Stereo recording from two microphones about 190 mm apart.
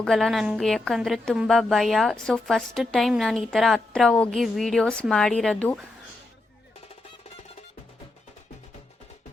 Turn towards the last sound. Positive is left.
turn(degrees=35)  # may be behind; listen again after turning